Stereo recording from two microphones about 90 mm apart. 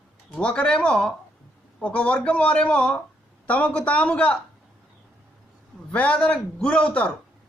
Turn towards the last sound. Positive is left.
turn(degrees=15)  # may be behind; listen again after turning